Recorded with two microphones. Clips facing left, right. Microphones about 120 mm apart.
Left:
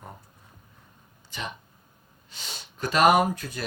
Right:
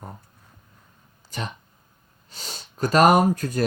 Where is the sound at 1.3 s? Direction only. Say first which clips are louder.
Right 3 dB; 40° right (ahead or behind).